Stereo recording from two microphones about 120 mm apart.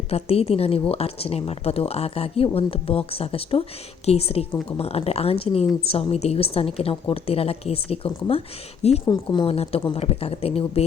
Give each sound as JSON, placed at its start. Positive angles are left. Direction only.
{"t": 0.1, "sound": "a woman's voice", "side_deg": 55}
{"t": 9.0, "sound": "a woman's voice", "side_deg": 40}